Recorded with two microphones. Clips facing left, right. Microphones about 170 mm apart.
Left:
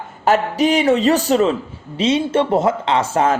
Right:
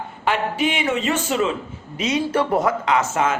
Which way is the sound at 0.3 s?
40° left (ahead or behind).